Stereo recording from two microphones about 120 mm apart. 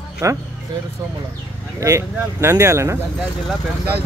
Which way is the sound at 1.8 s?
25° right (ahead or behind).